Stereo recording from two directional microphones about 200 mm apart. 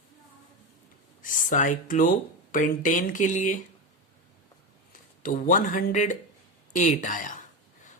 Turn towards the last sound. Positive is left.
turn(degrees=40)  # may be behind; listen again after turning